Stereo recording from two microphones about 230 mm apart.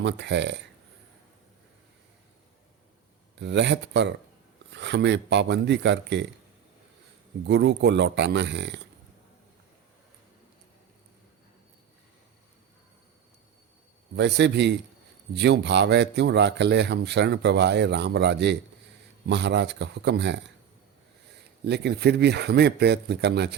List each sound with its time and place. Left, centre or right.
0.0 s a man's voice: right
3.3 s a man's voice: right
7.4 s a man's voice: right
14.2 s a man's voice: right